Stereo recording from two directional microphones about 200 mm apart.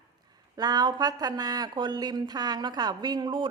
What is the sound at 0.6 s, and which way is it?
Speech, 20° right (ahead or behind).